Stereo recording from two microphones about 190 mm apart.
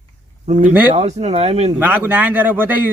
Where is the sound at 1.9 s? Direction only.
10° right (ahead or behind).